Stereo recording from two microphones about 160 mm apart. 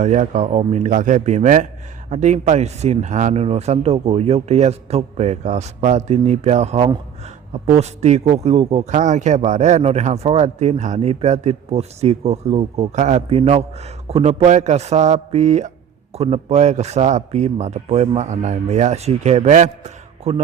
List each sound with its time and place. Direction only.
0.0 s a man's voice: 50° right (ahead or behind)